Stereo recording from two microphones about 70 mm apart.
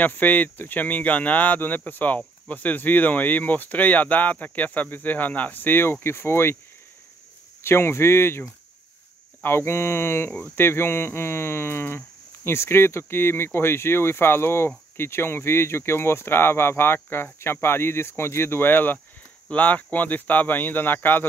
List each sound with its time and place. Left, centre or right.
0.0 s speech: left
7.6 s speech: left